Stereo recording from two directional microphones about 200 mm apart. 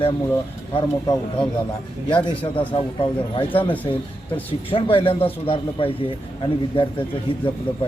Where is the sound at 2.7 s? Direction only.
25° left (ahead or behind).